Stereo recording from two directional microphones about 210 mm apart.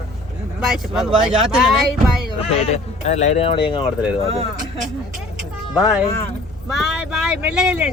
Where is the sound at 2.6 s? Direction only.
30° left (ahead or behind).